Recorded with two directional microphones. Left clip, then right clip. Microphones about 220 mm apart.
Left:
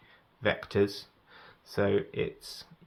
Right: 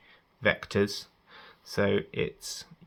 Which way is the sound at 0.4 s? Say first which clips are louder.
Right 1 dB; 15° right (ahead or behind).